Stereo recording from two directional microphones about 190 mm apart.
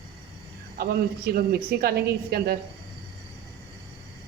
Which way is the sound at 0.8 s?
50° right (ahead or behind).